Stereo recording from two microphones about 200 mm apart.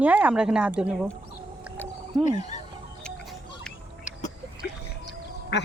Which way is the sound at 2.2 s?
35° left (ahead or behind).